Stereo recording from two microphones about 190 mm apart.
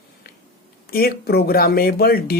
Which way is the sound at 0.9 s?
55° left (ahead or behind).